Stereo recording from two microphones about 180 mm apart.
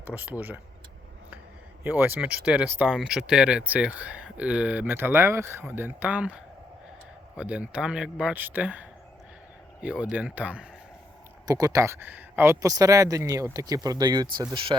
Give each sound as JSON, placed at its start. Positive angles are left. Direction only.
{"t": 0.1, "sound": "speech", "side_deg": -10}
{"t": 1.8, "sound": "speech", "side_deg": -10}
{"t": 11.4, "sound": "speech", "side_deg": -20}